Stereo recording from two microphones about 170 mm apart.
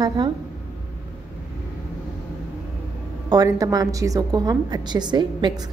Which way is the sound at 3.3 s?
20° right (ahead or behind).